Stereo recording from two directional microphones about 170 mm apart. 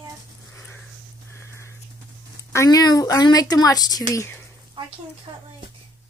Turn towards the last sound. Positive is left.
turn(degrees=-25)  # may be behind; listen again after turning